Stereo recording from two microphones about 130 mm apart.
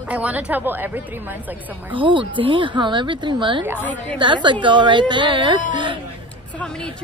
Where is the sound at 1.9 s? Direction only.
40° right (ahead or behind).